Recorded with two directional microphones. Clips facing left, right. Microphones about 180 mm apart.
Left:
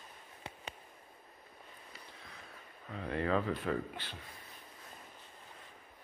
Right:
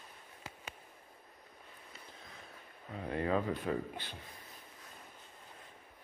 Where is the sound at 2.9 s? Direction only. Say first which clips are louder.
Even; 20° right (ahead or behind).